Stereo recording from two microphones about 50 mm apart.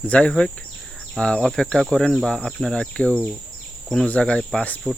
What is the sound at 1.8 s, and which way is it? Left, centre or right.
Insect, centre.